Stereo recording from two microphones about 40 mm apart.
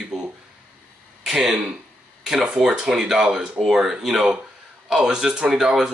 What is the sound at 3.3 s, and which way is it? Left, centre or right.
Speech, centre.